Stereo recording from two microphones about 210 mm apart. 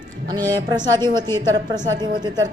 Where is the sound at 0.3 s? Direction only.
20° right (ahead or behind).